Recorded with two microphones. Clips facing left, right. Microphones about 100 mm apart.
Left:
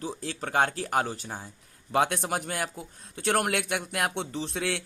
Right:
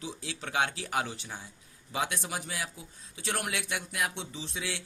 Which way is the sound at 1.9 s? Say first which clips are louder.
Left 8 dB; 55° left (ahead or behind).